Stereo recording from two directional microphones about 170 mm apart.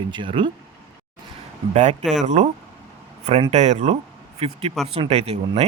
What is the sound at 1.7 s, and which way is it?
Speech, 40° right (ahead or behind).